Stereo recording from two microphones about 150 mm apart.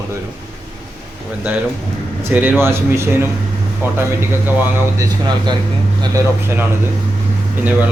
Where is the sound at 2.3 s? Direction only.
10° right (ahead or behind).